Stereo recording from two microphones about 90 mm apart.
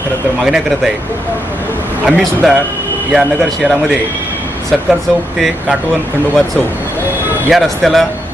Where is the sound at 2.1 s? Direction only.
10° right (ahead or behind).